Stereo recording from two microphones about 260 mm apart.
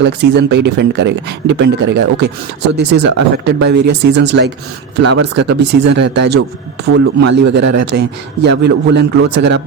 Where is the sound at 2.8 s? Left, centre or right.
Right.